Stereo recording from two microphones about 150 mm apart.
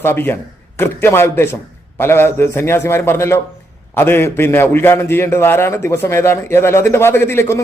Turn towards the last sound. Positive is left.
turn(degrees=15)  # may be behind; listen again after turning